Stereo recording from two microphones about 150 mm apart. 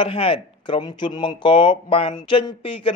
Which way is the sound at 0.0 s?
35° left (ahead or behind).